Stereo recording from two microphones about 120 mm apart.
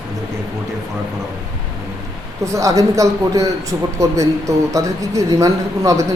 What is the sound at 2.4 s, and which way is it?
A man's voice, 25° right (ahead or behind).